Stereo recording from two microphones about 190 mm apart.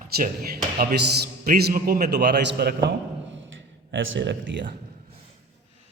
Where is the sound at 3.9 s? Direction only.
75° right (ahead or behind).